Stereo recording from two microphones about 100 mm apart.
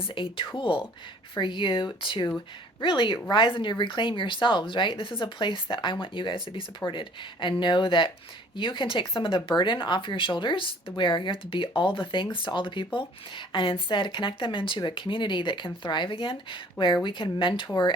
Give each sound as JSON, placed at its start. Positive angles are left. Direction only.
{"t": 0.0, "sound": "speech", "side_deg": 60}